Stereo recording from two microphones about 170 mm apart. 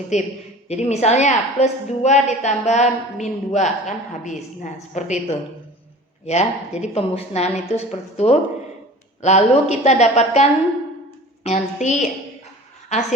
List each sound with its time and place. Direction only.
0.1 s a woman's voice: 40° left (ahead or behind)